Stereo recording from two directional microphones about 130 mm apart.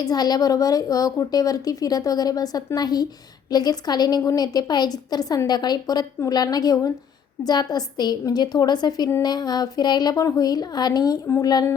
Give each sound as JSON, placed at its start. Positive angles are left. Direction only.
{"t": 0.0, "sound": "a woman's voice", "side_deg": 30}